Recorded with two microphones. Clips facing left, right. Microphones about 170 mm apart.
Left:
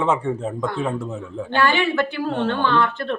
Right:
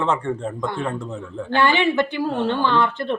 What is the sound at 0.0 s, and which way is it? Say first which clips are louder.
Speech: left 1 dB; 5° left (ahead or behind).